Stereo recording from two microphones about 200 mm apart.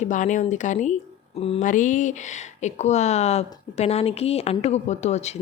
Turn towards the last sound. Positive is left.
turn(degrees=35)  # may be behind; listen again after turning